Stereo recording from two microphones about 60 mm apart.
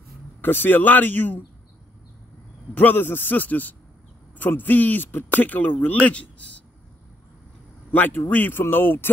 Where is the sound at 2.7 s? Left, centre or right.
Left.